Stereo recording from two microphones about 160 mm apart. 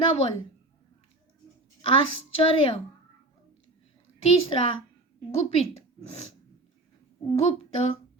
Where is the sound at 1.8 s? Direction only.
35° left (ahead or behind).